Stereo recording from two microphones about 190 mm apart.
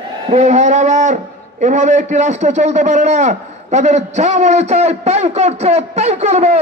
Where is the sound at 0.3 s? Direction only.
35° right (ahead or behind).